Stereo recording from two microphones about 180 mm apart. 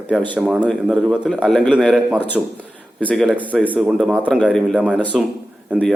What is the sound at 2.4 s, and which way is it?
A man's voice, 5° right (ahead or behind).